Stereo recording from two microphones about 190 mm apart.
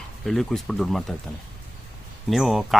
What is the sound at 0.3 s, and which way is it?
Speech, centre (ahead or behind).